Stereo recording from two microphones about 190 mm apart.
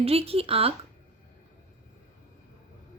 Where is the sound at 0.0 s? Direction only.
30° right (ahead or behind).